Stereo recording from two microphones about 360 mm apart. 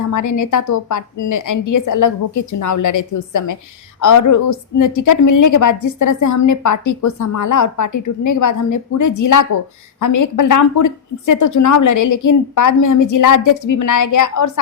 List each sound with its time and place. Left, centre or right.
0.1 s a woman's voice: left